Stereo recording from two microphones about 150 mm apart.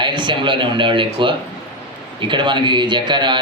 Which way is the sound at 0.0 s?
30° right (ahead or behind).